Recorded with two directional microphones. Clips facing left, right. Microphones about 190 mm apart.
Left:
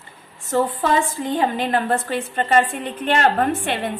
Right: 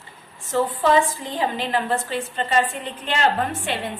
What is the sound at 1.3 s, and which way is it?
A woman's voice, 50° left (ahead or behind).